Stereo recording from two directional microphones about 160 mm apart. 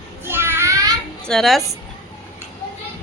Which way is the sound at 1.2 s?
5° left (ahead or behind).